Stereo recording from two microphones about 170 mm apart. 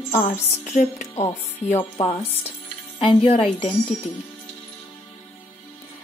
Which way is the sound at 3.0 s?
30° left (ahead or behind).